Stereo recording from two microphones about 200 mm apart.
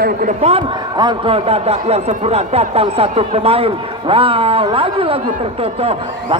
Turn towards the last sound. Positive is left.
turn(degrees=-30)  # may be behind; listen again after turning